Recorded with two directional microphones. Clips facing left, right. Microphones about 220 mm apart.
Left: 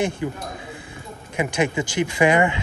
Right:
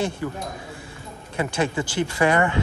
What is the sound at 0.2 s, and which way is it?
Speech, 15° left (ahead or behind).